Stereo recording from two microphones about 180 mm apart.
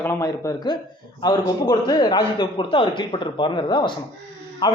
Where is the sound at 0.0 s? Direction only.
15° left (ahead or behind).